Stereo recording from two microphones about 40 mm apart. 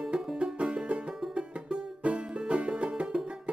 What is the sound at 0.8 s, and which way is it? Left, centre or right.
Music, right.